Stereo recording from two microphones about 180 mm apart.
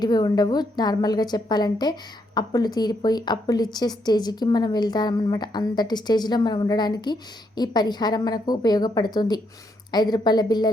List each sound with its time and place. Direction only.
0.0 s a woman's voice: 20° left (ahead or behind)